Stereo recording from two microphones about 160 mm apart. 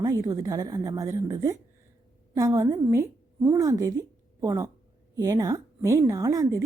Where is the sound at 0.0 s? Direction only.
25° right (ahead or behind).